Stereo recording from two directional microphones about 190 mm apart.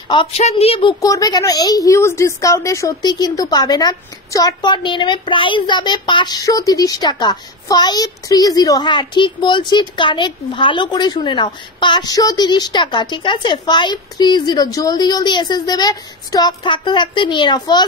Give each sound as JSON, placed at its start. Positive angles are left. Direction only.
{"t": 0.1, "sound": "a woman's voice", "side_deg": 30}
{"t": 1.0, "sound": "a woman's voice", "side_deg": 20}